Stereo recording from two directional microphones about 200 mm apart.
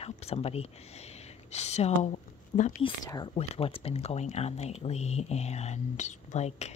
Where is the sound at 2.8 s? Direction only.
20° left (ahead or behind).